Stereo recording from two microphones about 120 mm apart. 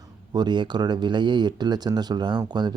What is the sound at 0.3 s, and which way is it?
Speech, 40° right (ahead or behind).